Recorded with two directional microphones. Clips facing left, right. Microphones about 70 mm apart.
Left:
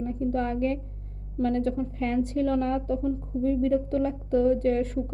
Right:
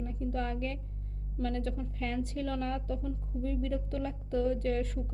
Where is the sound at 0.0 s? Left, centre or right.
Left.